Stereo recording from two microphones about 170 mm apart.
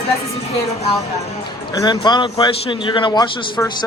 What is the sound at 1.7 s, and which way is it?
A man's voice, 20° left (ahead or behind).